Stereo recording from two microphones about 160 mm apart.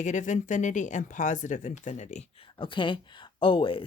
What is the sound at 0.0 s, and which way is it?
Speech, 50° left (ahead or behind).